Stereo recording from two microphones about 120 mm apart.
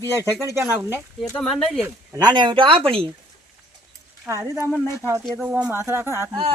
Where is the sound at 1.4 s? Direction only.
5° left (ahead or behind).